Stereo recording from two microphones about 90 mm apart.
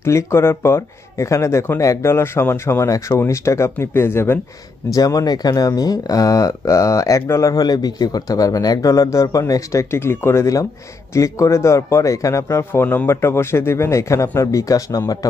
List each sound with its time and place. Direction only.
0.0 s speech: 30° left (ahead or behind)
4.9 s speech: 45° left (ahead or behind)
7.6 s speech: 45° left (ahead or behind)